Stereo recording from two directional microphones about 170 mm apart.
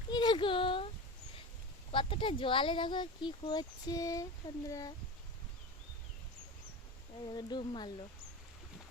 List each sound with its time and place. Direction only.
0.1 s a sound: 25° left (ahead or behind)
1.9 s speech: 30° left (ahead or behind)
7.3 s speech: 25° left (ahead or behind)